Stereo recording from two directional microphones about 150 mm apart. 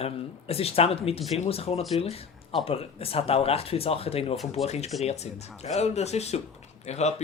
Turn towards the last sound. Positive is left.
turn(degrees=45)  # may be behind; listen again after turning